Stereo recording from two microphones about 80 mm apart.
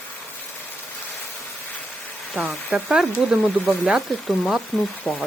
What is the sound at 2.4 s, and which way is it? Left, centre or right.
Speech, centre.